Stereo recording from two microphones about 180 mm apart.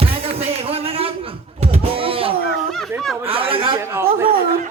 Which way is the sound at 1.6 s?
35° right (ahead or behind).